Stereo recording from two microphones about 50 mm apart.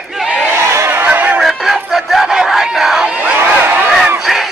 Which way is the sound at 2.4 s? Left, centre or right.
Centre.